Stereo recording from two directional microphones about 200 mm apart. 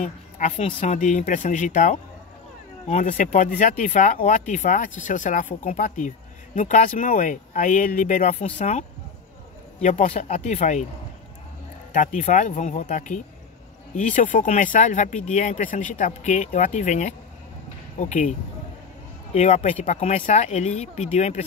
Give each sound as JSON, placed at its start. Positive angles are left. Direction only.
{"t": 0.0, "sound": "speech", "side_deg": 35}
{"t": 11.9, "sound": "speech", "side_deg": 40}
{"t": 19.3, "sound": "speech", "side_deg": 35}